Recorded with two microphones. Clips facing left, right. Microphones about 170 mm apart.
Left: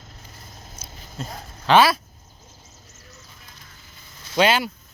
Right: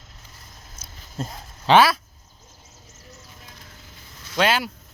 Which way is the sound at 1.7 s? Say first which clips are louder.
Even; 30° right (ahead or behind).